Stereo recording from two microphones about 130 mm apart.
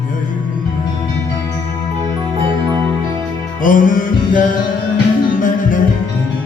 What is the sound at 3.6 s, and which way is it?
Music, 90° left.